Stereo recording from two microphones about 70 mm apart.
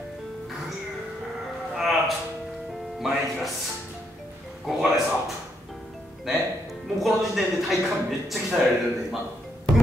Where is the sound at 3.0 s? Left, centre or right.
Centre.